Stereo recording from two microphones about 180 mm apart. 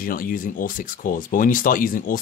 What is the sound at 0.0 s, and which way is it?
Speech, 50° left (ahead or behind).